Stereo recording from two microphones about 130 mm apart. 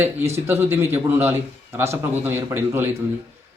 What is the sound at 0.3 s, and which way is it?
A man's voice, 20° right (ahead or behind).